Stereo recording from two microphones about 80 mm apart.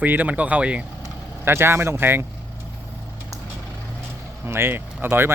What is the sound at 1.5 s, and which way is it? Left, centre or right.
Speech, right.